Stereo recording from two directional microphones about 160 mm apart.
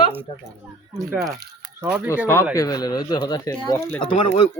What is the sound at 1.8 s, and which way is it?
Speech, 10° right (ahead or behind).